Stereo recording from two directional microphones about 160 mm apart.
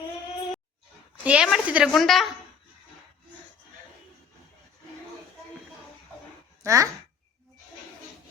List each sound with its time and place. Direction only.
1.2 s a woman's voice: 5° right (ahead or behind)
6.6 s speech: 20° right (ahead or behind)